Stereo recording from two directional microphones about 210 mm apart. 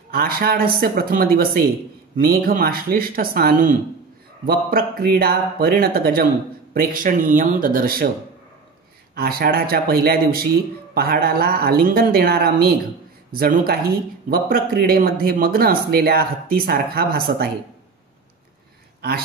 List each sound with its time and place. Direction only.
0.1 s speech: 45° right (ahead or behind)
9.1 s speech: 45° right (ahead or behind)
18.9 s speech: 50° right (ahead or behind)